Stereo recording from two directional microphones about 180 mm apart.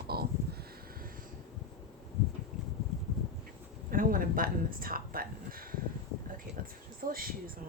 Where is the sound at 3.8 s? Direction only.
50° right (ahead or behind).